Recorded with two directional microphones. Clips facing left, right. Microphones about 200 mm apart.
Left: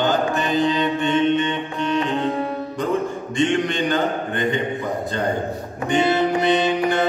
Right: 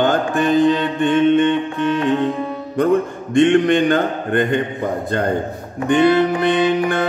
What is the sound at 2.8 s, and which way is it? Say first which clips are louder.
Mantra: right 7 dB; 55° right (ahead or behind).